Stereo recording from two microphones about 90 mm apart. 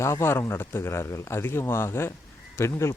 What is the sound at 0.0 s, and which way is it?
Speech, 30° left (ahead or behind).